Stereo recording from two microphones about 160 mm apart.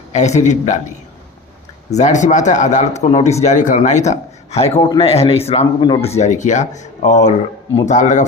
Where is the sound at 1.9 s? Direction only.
45° left (ahead or behind).